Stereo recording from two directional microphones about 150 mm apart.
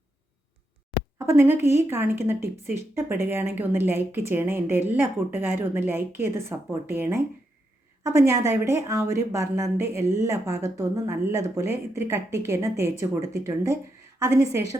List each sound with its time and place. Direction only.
1.3 s speech: 15° right (ahead or behind)